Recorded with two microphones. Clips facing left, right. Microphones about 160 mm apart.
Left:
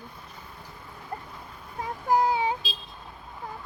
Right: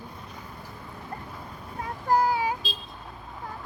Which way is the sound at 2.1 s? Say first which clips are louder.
Even; 20° left (ahead or behind).